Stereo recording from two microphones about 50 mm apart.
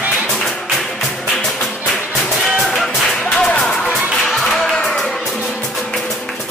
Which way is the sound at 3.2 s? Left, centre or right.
Centre.